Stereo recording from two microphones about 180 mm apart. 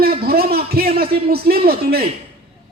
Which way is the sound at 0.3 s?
60° right (ahead or behind).